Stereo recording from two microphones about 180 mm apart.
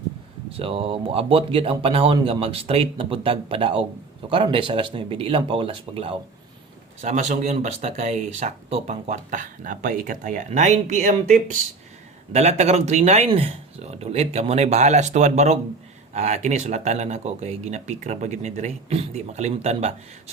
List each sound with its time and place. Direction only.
0.5 s speech: 30° right (ahead or behind)